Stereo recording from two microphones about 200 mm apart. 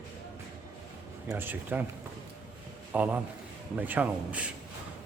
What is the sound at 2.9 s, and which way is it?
A man's voice, 10° right (ahead or behind).